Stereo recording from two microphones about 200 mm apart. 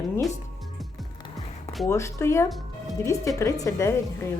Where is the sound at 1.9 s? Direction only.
15° left (ahead or behind).